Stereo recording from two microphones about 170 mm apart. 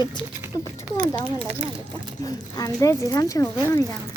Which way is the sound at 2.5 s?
20° left (ahead or behind).